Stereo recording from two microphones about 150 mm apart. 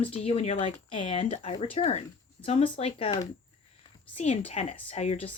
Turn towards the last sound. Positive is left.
turn(degrees=45)  # may be behind; listen again after turning